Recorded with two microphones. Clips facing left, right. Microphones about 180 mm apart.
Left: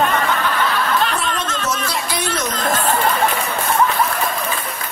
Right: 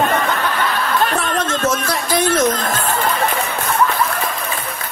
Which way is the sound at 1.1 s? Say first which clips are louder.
Right 3 dB; 50° right (ahead or behind).